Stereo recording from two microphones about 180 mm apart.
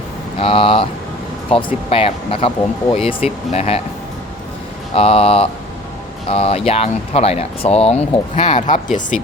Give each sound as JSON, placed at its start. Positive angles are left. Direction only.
{"t": 0.3, "sound": "speech", "side_deg": 30}
{"t": 4.9, "sound": "speech", "side_deg": 30}
{"t": 8.5, "sound": "speech", "side_deg": 45}